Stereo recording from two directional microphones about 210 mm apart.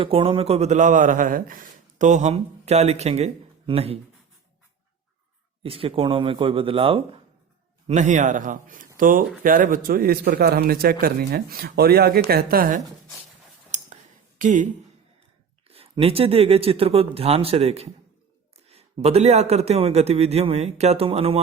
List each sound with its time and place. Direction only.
0.0 s speech: 25° right (ahead or behind)
5.6 s a man's voice: 25° right (ahead or behind)
13.7 s a sound: 35° right (ahead or behind)
15.6 s a man's voice: 25° right (ahead or behind)